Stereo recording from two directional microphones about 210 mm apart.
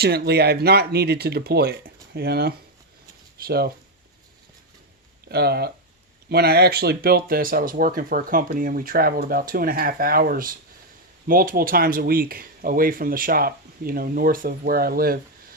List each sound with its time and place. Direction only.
0.0 s speech: 50° right (ahead or behind)
5.3 s speech: 50° right (ahead or behind)